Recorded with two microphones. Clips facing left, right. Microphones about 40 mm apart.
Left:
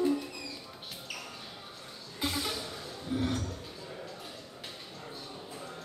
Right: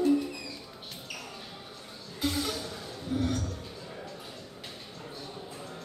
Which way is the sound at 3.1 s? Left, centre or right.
Centre.